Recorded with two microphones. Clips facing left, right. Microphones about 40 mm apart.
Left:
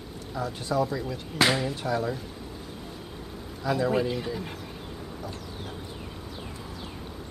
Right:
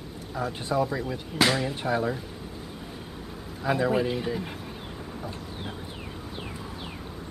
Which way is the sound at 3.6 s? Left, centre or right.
Right.